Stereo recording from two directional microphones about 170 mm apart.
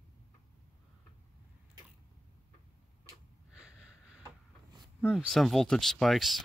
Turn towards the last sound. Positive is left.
turn(degrees=0)  # may be behind; listen again after turning